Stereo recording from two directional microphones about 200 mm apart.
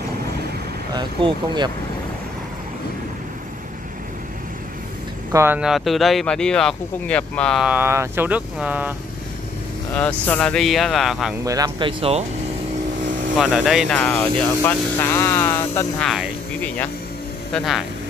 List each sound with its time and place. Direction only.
0.9 s speech: 20° right (ahead or behind)
5.3 s speech: 10° right (ahead or behind)
10.2 s speech: 5° left (ahead or behind)
11.4 s speech: 15° right (ahead or behind)
12.0 s speech: 30° right (ahead or behind)
13.4 s speech: centre (ahead or behind); by 15.9 s 15° left (ahead or behind)
16.0 s speech: centre (ahead or behind)